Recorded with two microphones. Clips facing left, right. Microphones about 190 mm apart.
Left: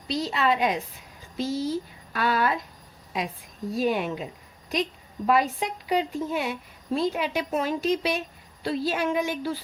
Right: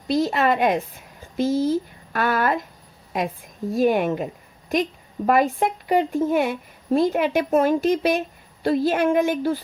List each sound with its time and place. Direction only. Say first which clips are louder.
0.1 s a woman's voice: right 5 dB; 50° right (ahead or behind)
3.7 s a woman's voice: right 6 dB; 50° right (ahead or behind)